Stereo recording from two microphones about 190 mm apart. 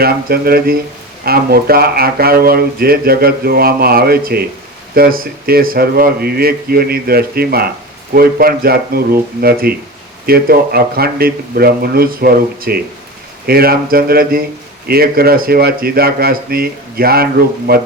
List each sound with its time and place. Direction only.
0.0 s speech: 50° right (ahead or behind)